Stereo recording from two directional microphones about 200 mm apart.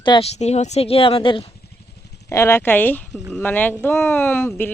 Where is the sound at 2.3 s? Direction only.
15° left (ahead or behind).